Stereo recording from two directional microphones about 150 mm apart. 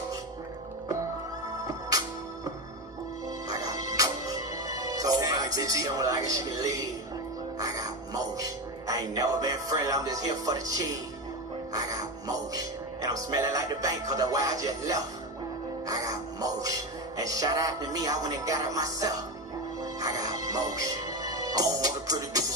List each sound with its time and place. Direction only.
1.7 s music: 25° right (ahead or behind)
3.4 s music: 25° right (ahead or behind)
7.5 s speech: 25° right (ahead or behind)
15.9 s music: 25° right (ahead or behind)